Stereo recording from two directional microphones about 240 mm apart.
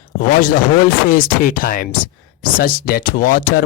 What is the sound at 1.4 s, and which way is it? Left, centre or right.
Speech, left.